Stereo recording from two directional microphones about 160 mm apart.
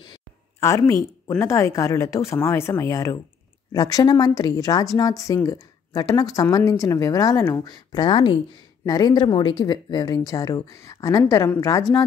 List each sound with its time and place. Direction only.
0.6 s a woman's voice: 20° left (ahead or behind)